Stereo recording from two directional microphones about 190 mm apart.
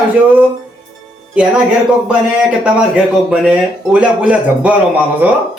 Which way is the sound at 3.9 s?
5° right (ahead or behind).